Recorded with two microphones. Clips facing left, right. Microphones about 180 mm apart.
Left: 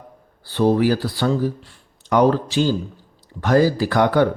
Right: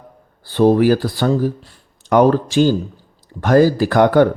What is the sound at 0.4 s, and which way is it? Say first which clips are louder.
A man's voice: right 4 dB; 50° right (ahead or behind).